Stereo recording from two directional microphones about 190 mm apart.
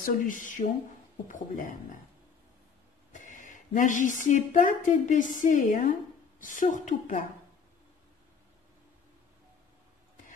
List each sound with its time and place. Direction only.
0.0 s a woman's voice: 45° left (ahead or behind)
3.1 s a woman's voice: 45° left (ahead or behind)